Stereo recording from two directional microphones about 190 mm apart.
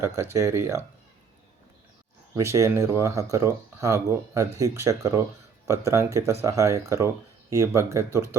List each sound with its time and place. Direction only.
0.0 s speech: 15° right (ahead or behind)
2.3 s speech: 15° right (ahead or behind)